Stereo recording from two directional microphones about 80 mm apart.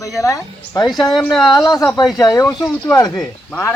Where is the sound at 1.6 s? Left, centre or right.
Left.